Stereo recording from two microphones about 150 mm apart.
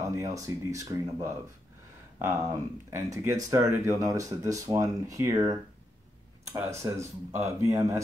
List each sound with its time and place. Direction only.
0.0 s speech: 20° right (ahead or behind)